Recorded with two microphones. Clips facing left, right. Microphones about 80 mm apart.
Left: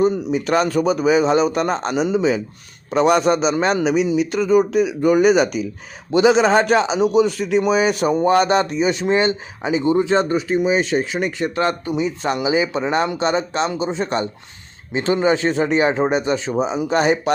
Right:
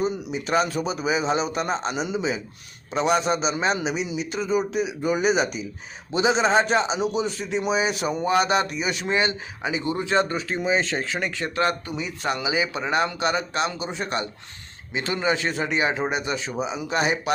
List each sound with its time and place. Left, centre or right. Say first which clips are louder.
0.0 s a man's voice: left 8 dB; left